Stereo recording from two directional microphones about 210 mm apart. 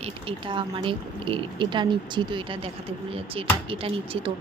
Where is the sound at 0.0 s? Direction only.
25° right (ahead or behind).